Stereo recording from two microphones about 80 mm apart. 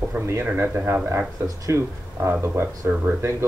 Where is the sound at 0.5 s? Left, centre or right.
Right.